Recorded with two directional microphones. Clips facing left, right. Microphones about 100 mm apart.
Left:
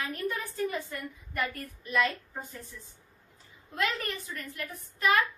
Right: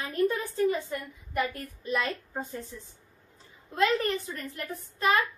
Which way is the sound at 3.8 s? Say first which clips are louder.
Right 7 dB; 30° right (ahead or behind).